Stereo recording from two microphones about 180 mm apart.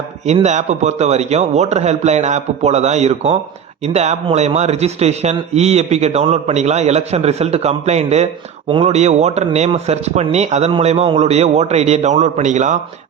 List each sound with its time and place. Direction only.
0.3 s a man's voice: 40° right (ahead or behind)